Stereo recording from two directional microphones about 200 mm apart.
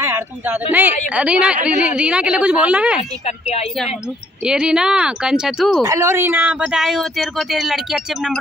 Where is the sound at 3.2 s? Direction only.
30° left (ahead or behind).